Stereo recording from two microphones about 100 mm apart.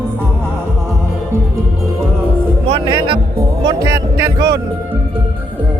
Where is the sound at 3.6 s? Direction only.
45° right (ahead or behind).